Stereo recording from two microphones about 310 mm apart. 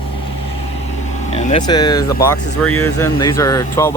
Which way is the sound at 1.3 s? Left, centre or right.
Centre.